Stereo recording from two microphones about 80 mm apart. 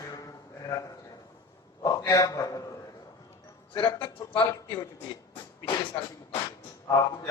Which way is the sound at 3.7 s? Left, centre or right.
Left.